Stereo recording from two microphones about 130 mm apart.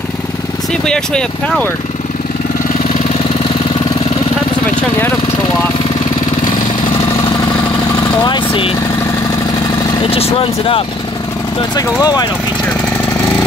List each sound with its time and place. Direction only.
0.8 s speech: 5° left (ahead or behind)
8.2 s speech: 40° left (ahead or behind)
10.0 s speech: 50° left (ahead or behind)
11.7 s speech: 30° left (ahead or behind)